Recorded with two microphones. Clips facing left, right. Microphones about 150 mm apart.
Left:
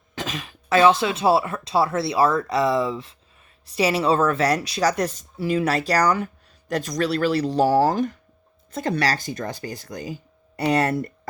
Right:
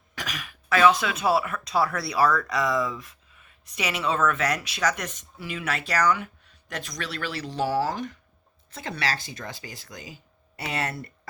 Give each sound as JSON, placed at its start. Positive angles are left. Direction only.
{"t": 0.2, "sound": "speech", "side_deg": 25}